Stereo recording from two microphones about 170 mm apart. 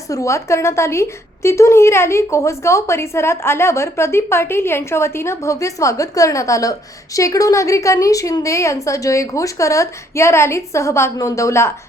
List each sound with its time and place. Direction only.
0.1 s a woman's voice: 15° left (ahead or behind)